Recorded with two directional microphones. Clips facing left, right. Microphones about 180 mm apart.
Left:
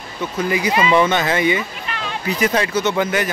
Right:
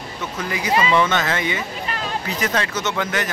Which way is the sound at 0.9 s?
10° left (ahead or behind).